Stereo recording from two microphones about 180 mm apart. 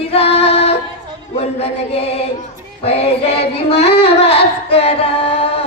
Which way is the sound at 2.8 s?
35° left (ahead or behind).